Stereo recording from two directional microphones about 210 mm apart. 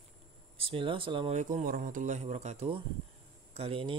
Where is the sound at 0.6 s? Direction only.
25° right (ahead or behind).